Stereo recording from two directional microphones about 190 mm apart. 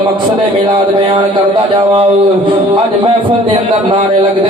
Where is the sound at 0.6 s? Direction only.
25° right (ahead or behind).